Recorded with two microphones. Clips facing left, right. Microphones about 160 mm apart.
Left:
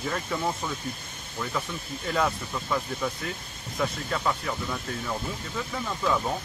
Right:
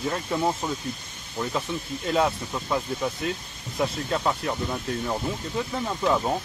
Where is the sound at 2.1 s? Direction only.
25° right (ahead or behind).